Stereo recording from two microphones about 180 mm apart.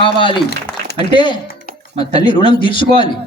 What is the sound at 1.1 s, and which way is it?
A man's voice, 25° left (ahead or behind).